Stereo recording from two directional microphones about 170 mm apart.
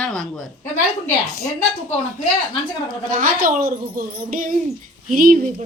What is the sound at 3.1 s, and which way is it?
Speech, 55° right (ahead or behind).